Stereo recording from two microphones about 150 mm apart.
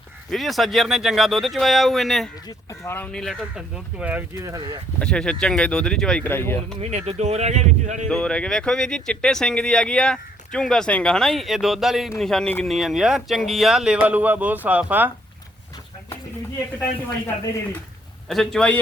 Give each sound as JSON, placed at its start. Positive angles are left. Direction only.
{"t": 0.3, "sound": "speech", "side_deg": 0}
{"t": 2.5, "sound": "speech", "side_deg": 15}
{"t": 4.9, "sound": "speech", "side_deg": 5}
{"t": 6.9, "sound": "speech", "side_deg": -45}
{"t": 8.1, "sound": "speech", "side_deg": 5}
{"t": 18.3, "sound": "speech", "side_deg": 5}